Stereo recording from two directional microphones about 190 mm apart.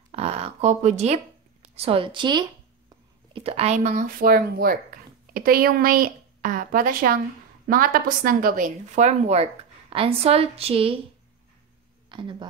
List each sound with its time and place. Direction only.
0.1 s a sound: 35° right (ahead or behind)
1.8 s a woman's voice: 30° right (ahead or behind)
12.1 s a woman's voice: 25° right (ahead or behind)